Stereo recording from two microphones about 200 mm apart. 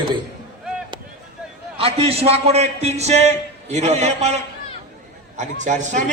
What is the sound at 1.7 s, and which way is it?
A man's voice, 30° right (ahead or behind).